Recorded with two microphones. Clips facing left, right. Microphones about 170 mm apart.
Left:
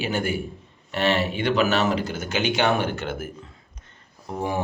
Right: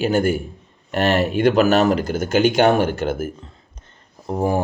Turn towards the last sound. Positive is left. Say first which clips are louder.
# right 7 dB
turn(degrees=-40)  # may be behind; listen again after turning